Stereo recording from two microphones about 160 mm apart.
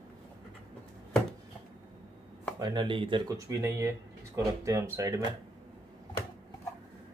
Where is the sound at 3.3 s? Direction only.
20° right (ahead or behind).